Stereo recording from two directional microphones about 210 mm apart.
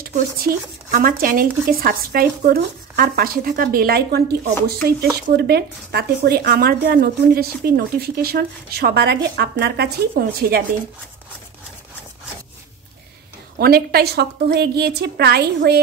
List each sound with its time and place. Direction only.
0.9 s speech: 40° right (ahead or behind)
13.6 s speech: 45° right (ahead or behind)